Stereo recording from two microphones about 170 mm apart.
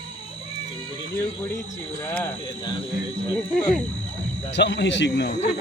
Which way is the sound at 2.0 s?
15° left (ahead or behind).